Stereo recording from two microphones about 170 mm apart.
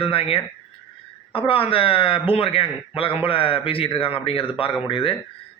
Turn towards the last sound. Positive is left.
turn(degrees=30)  # may be behind; listen again after turning